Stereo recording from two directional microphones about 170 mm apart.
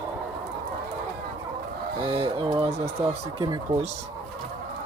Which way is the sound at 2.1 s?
30° right (ahead or behind).